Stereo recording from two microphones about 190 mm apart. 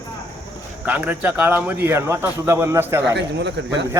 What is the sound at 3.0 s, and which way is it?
Speech, 65° right (ahead or behind).